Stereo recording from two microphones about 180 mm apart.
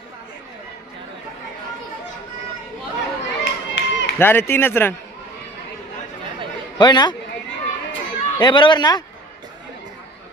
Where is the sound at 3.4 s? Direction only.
80° left.